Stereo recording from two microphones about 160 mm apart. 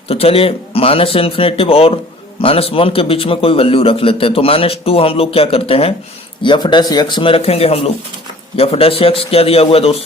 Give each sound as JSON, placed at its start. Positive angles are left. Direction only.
{"t": 0.1, "sound": "a man's voice", "side_deg": 35}